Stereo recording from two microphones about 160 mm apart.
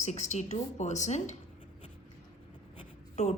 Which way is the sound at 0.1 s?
45° left (ahead or behind).